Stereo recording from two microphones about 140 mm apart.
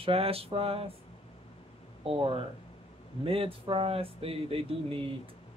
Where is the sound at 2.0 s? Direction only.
40° right (ahead or behind).